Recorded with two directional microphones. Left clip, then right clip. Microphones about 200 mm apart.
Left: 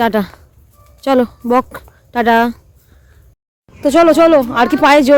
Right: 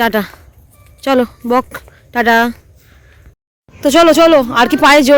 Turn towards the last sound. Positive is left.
turn(degrees=0)  # may be behind; listen again after turning